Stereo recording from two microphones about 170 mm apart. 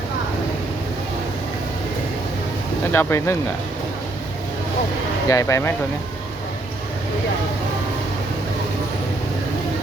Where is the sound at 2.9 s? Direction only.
15° left (ahead or behind).